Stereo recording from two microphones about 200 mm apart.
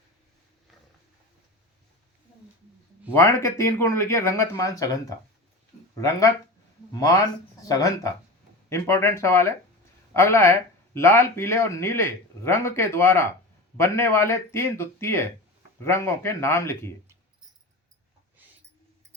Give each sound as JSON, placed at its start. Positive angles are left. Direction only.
{"t": 3.1, "sound": "speech", "side_deg": 15}
{"t": 7.6, "sound": "speech", "side_deg": 15}